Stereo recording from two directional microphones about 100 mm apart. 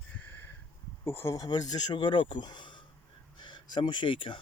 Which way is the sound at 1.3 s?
40° left (ahead or behind).